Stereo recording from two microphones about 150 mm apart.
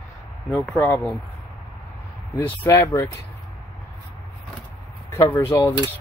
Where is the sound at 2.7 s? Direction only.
20° left (ahead or behind).